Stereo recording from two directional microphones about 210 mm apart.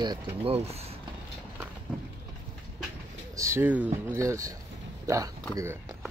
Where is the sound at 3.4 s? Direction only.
10° right (ahead or behind).